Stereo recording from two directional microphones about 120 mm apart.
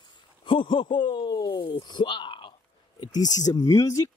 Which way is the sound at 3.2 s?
30° left (ahead or behind).